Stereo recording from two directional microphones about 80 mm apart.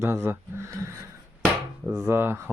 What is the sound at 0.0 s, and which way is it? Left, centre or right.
Speech, right.